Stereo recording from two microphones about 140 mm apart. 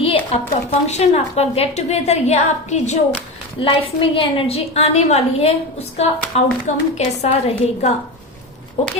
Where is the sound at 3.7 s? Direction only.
40° left (ahead or behind).